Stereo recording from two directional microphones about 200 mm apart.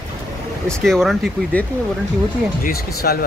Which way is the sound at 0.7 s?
Centre (ahead or behind).